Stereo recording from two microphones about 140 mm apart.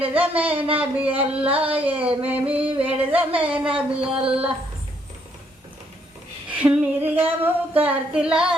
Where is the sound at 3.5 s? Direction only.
10° right (ahead or behind).